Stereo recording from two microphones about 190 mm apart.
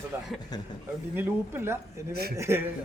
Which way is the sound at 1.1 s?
10° right (ahead or behind).